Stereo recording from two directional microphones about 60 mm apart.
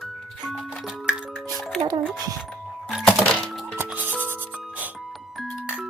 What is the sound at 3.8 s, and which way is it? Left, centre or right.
Music, right.